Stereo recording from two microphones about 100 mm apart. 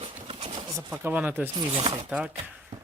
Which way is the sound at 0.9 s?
15° right (ahead or behind).